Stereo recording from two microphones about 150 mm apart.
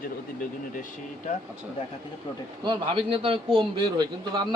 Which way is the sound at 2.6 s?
35° right (ahead or behind).